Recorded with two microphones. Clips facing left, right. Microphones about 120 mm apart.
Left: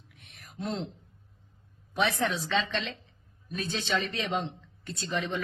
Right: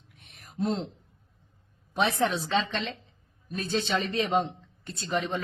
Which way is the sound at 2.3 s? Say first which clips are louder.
Right 2 dB; 30° right (ahead or behind).